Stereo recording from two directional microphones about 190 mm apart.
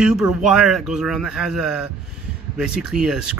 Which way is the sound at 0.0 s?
5° right (ahead or behind).